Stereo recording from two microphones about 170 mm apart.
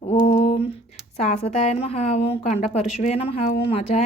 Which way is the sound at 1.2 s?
40° left (ahead or behind).